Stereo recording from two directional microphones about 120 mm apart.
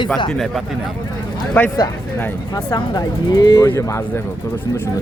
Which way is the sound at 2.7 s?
35° left (ahead or behind).